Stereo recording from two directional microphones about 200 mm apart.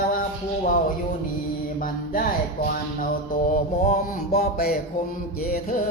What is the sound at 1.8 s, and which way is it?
Mantra, 45° left (ahead or behind).